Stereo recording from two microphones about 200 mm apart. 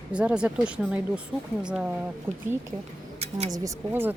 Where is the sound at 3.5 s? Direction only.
15° right (ahead or behind).